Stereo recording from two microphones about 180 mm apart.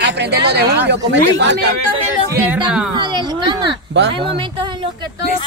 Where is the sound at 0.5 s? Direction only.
70° right (ahead or behind).